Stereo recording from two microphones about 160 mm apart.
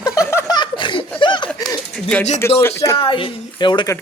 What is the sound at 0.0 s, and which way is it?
Chuckle, 20° left (ahead or behind).